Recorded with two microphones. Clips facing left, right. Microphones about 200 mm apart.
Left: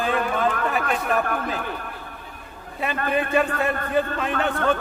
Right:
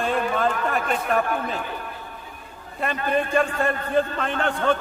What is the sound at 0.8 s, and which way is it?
Speech, 55° left (ahead or behind).